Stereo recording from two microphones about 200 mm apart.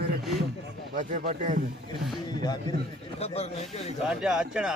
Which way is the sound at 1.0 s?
40° right (ahead or behind).